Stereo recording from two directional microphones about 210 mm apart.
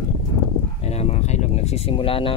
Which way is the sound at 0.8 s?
30° left (ahead or behind).